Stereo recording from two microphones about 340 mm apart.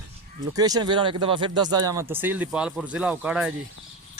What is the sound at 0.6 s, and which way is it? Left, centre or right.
Speech, centre.